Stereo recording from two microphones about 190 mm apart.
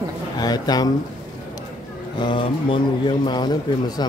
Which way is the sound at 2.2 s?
25° left (ahead or behind).